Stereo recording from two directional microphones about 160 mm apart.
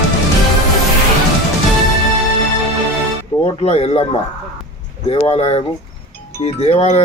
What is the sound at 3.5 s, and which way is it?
Speech, 40° left (ahead or behind).